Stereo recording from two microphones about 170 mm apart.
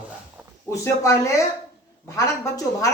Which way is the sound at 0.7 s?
15° left (ahead or behind).